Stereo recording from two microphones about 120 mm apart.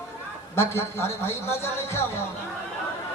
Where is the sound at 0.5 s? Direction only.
20° left (ahead or behind).